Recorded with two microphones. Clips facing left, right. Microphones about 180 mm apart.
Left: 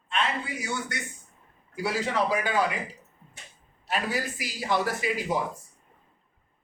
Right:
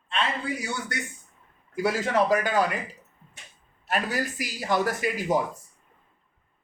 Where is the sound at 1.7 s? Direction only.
50° right (ahead or behind).